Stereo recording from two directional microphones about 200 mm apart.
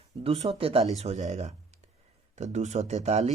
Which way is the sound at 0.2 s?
30° right (ahead or behind).